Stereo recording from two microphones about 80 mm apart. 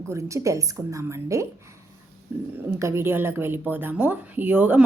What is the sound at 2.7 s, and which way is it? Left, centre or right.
Speech, right.